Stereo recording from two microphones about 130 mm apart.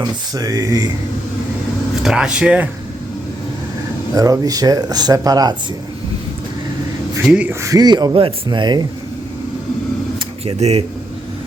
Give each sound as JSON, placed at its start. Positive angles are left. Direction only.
{"t": 0.0, "sound": "speech", "side_deg": -30}
{"t": 2.0, "sound": "speech", "side_deg": -5}
{"t": 4.1, "sound": "speech", "side_deg": -25}
{"t": 7.3, "sound": "speech", "side_deg": -10}
{"t": 7.6, "sound": "speech", "side_deg": -30}
{"t": 10.2, "sound": "a sound", "side_deg": -55}